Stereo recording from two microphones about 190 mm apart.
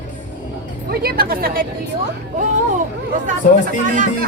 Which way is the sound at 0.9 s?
50° right (ahead or behind).